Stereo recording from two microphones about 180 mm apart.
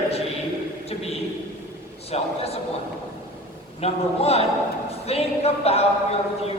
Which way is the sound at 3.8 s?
35° left (ahead or behind).